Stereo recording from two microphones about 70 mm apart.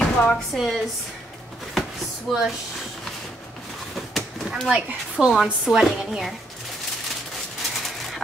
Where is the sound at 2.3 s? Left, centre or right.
Centre.